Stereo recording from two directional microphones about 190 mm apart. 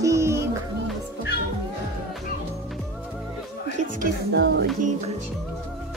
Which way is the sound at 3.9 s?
55° right (ahead or behind).